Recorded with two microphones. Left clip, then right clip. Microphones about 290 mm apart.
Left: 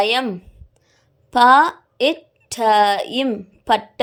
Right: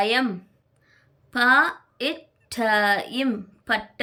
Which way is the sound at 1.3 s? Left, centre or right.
Centre.